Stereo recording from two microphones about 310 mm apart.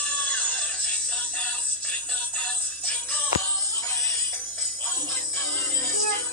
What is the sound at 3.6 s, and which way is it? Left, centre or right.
Jingle bell, centre.